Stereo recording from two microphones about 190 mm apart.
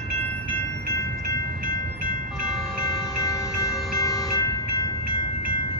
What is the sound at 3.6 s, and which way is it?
Train, 15° left (ahead or behind).